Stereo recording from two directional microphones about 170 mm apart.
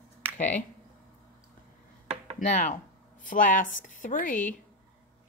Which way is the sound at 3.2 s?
50° left (ahead or behind).